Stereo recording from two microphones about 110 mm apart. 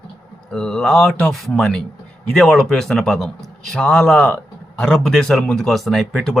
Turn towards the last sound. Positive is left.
turn(degrees=0)  # may be behind; listen again after turning